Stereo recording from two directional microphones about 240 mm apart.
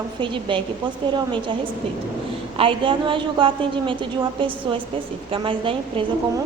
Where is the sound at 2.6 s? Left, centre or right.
Right.